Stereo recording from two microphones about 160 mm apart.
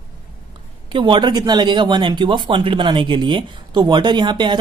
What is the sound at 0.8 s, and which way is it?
Speech, 30° right (ahead or behind).